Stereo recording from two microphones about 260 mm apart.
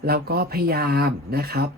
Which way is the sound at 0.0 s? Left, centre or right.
Right.